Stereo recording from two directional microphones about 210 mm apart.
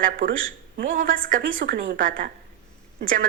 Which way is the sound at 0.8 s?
40° right (ahead or behind).